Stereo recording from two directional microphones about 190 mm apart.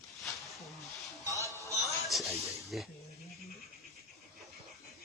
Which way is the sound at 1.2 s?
15° right (ahead or behind).